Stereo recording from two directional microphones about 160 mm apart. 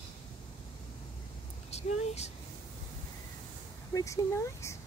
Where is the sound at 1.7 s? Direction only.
40° left (ahead or behind).